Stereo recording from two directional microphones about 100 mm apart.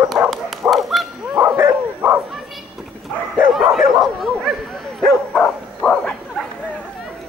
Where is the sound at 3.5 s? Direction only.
Centre (ahead or behind).